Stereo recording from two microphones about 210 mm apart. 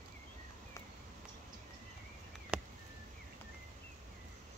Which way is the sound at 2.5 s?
5° right (ahead or behind).